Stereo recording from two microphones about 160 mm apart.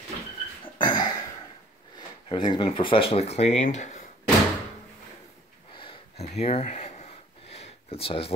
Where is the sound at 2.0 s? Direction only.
30° left (ahead or behind); by 4.0 s 50° left (ahead or behind).